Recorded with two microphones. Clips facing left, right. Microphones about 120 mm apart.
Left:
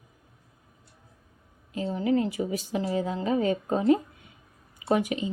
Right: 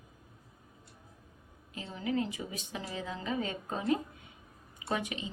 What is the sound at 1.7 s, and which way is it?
A woman's voice, 35° left (ahead or behind).